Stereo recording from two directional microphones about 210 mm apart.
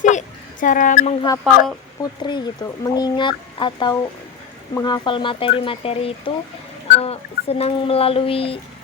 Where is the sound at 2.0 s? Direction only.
20° left (ahead or behind).